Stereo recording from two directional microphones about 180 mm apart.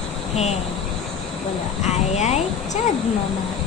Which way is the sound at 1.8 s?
35° left (ahead or behind).